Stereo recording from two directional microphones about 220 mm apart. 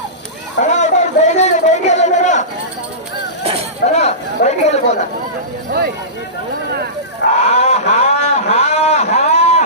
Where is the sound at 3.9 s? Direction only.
30° left (ahead or behind).